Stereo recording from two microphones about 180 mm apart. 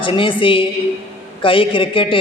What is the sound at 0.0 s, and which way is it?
A man's voice, 30° left (ahead or behind).